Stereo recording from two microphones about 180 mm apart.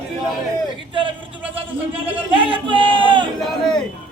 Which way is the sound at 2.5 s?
30° right (ahead or behind).